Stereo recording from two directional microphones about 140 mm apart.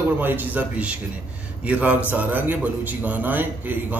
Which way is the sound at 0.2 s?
15° right (ahead or behind).